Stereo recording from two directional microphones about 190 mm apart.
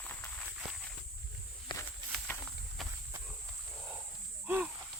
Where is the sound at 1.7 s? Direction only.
25° left (ahead or behind).